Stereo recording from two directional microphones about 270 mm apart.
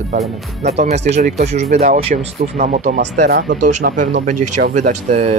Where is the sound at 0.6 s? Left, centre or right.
Right.